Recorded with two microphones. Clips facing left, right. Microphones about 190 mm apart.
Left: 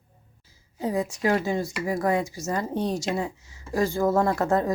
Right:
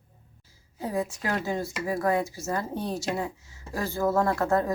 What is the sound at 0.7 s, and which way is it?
A woman's voice, 15° left (ahead or behind).